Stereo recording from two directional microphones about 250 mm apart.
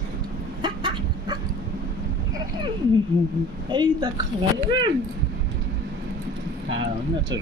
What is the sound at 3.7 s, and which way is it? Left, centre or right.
Speech, centre.